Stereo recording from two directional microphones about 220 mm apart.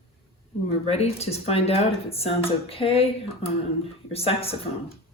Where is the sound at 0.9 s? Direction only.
30° left (ahead or behind).